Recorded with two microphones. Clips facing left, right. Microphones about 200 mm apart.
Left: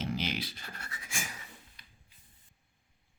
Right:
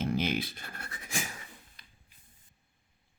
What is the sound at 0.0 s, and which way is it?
Scratch, 55° right (ahead or behind).